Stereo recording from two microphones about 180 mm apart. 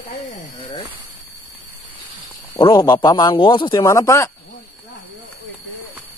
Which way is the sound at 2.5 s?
20° left (ahead or behind).